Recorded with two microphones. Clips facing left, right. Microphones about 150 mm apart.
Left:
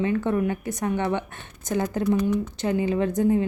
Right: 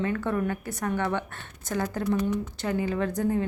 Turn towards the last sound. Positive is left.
turn(degrees=20)  # may be behind; listen again after turning